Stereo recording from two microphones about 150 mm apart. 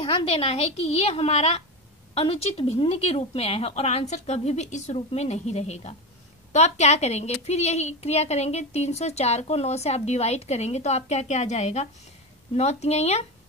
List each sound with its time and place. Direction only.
0.0 s a woman's voice: 40° left (ahead or behind)